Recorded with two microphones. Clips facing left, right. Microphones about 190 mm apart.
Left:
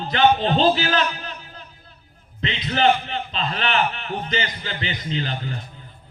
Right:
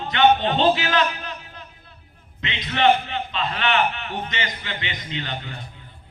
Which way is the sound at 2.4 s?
35° left (ahead or behind).